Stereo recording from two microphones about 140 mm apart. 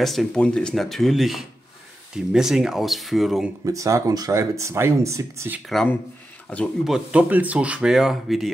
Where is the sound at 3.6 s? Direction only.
25° right (ahead or behind).